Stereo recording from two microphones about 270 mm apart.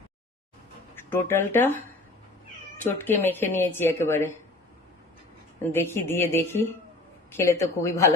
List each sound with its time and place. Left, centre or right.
1.1 s a woman's voice: centre
3.0 s a woman's voice: centre
5.7 s a woman's voice: centre